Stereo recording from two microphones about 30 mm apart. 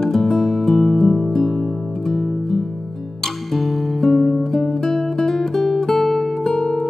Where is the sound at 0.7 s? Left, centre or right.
Centre.